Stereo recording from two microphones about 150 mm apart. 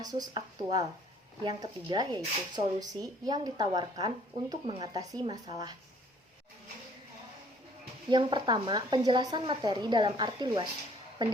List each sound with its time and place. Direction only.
0.0 s speech: 25° right (ahead or behind)
8.1 s speech: 30° right (ahead or behind)